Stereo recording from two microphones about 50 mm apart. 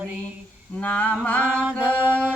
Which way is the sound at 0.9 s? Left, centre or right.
Left.